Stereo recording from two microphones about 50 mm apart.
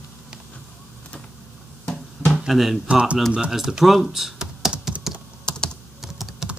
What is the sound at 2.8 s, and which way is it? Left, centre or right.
Speech, centre.